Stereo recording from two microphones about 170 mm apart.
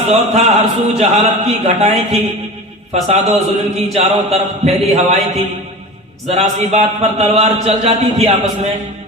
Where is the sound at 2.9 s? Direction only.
40° right (ahead or behind).